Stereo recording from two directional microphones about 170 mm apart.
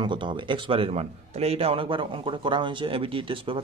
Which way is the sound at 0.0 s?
25° right (ahead or behind).